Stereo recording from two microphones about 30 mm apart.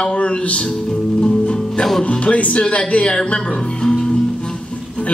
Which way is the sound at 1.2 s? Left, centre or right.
Left.